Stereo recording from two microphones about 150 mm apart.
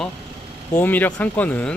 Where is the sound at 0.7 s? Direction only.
10° left (ahead or behind).